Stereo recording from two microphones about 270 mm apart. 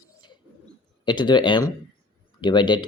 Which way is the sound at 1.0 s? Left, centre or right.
Centre.